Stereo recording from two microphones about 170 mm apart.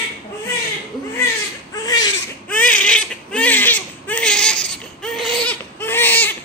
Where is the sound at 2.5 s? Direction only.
10° left (ahead or behind).